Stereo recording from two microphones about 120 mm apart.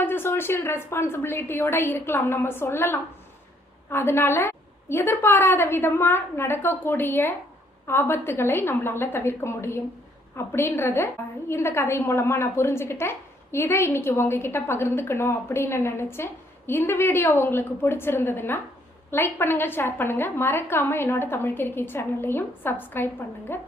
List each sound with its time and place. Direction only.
0.0 s a woman's voice: 20° left (ahead or behind)